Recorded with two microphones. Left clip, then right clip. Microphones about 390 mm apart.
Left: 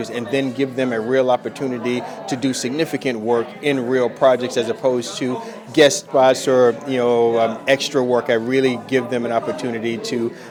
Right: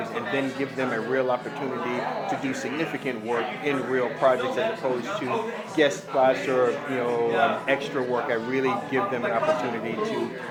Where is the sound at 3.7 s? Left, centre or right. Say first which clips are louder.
Left 8 dB; left.